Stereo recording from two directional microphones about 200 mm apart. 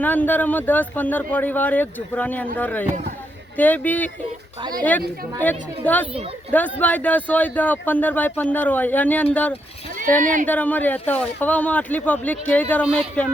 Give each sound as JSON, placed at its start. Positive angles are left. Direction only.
{"t": 0.0, "sound": "speech", "side_deg": 10}
{"t": 10.2, "sound": "speech", "side_deg": -40}
{"t": 10.4, "sound": "speech", "side_deg": 10}